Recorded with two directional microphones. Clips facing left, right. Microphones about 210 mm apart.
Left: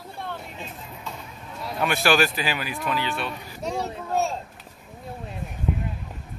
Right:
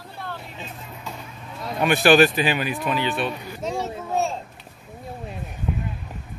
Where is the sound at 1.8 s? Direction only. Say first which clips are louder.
Right 6 dB; 20° right (ahead or behind).